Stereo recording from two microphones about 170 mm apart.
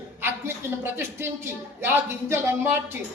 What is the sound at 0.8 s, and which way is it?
A woman's voice, 15° right (ahead or behind).